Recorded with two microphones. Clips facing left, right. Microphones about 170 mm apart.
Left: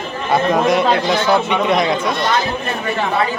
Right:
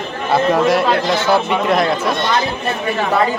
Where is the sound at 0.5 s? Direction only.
Centre (ahead or behind).